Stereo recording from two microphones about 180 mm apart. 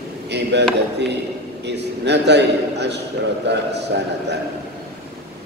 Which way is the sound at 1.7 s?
70° right (ahead or behind).